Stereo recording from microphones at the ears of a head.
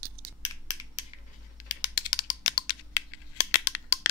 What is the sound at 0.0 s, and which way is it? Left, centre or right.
Crushing, right.